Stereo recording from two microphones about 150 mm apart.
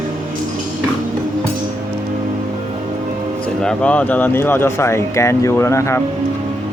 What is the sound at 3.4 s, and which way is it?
Speech, 5° left (ahead or behind).